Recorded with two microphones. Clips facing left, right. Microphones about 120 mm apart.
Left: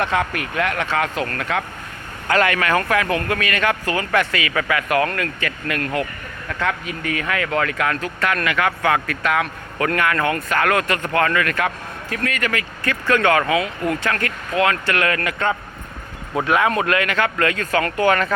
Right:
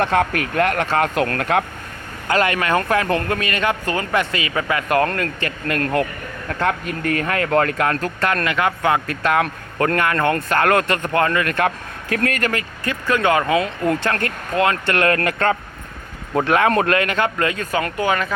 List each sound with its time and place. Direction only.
0.0 s speech: 45° right (ahead or behind)
2.2 s speech: 25° right (ahead or behind)
9.4 s speech: 40° right (ahead or behind)
11.6 s speech: 55° right (ahead or behind); by 12.6 s 35° right (ahead or behind)
12.8 s speech: 15° right (ahead or behind)
13.8 s speech: 30° right (ahead or behind)
15.0 s speech: 45° right (ahead or behind)
16.6 s speech: 40° right (ahead or behind); by 18.3 s 10° right (ahead or behind)